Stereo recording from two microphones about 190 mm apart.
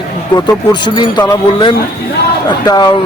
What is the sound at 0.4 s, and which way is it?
Speech, 25° left (ahead or behind).